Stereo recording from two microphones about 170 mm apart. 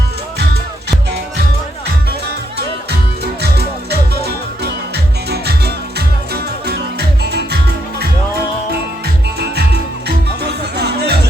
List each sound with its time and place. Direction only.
3.4 s music: 70° right (ahead or behind)
7.2 s music: 75° right (ahead or behind)
9.4 s music: 75° right (ahead or behind)